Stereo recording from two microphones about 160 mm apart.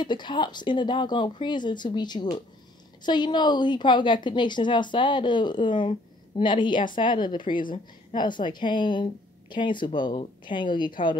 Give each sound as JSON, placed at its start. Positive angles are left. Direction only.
{"t": 0.0, "sound": "a woman's voice", "side_deg": 30}